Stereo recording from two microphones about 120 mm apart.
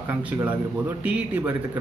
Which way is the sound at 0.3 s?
15° right (ahead or behind).